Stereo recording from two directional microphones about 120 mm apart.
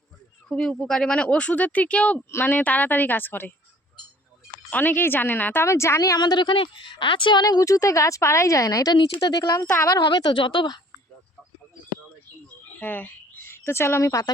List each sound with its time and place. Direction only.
0.4 s speech: 5° left (ahead or behind)
4.7 s a woman's voice: 15° left (ahead or behind); by 10.8 s 40° left (ahead or behind)
12.8 s speech: 15° left (ahead or behind)